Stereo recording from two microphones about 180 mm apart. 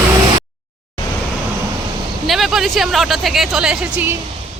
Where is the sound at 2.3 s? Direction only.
Centre (ahead or behind).